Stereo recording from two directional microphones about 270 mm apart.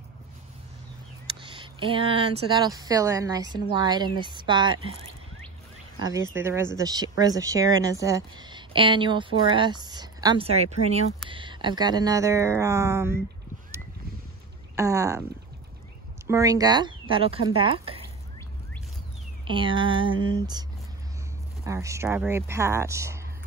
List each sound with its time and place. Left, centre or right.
1.4 s speech: centre
6.3 s speech: centre
14.8 s speech: centre
16.3 s speech: centre
19.4 s speech: centre
21.6 s speech: centre